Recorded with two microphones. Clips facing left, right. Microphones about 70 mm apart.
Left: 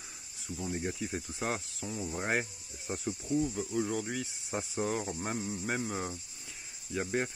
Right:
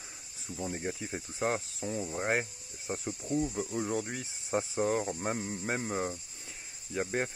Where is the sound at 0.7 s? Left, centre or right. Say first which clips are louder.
Left 1 dB; centre.